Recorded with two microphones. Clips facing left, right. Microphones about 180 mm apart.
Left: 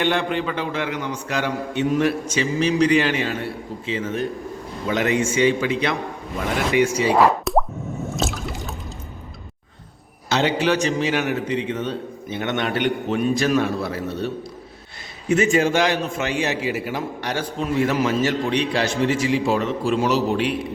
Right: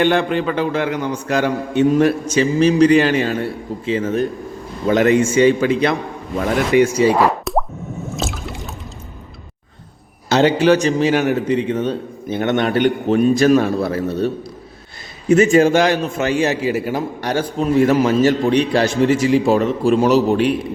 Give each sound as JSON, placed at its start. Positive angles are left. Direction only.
{"t": 0.0, "sound": "a man's voice", "side_deg": -45}
{"t": 7.4, "sound": "plop", "side_deg": 0}
{"t": 10.2, "sound": "a sound", "side_deg": -40}
{"t": 10.8, "sound": "a man's voice", "side_deg": -40}
{"t": 15.3, "sound": "a man's voice", "side_deg": -40}